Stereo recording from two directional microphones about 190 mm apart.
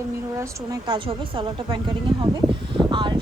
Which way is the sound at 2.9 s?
25° right (ahead or behind).